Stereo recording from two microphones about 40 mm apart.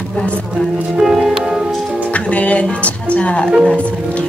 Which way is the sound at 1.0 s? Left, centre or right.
Centre.